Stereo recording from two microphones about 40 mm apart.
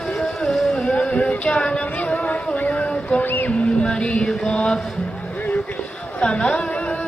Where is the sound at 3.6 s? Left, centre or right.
Left.